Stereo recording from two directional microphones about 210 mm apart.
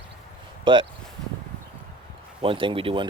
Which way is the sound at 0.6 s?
20° right (ahead or behind).